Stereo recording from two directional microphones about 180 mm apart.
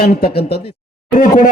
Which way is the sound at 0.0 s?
60° left (ahead or behind).